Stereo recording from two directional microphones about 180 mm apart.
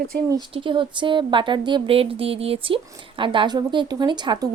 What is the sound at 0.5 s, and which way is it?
Speech, 30° right (ahead or behind).